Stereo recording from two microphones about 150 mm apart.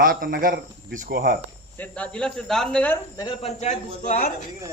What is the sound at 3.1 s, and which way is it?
Speech, 30° left (ahead or behind).